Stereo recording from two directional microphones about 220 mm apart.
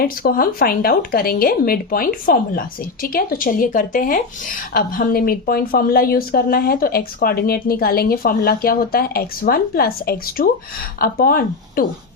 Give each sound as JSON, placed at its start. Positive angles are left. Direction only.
{"t": 0.0, "sound": "speech", "side_deg": 40}